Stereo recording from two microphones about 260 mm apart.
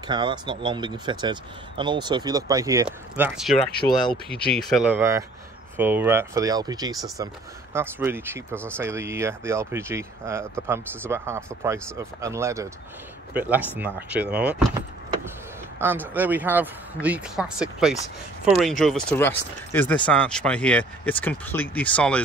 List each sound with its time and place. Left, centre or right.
0.1 s speech: centre
15.8 s speech: centre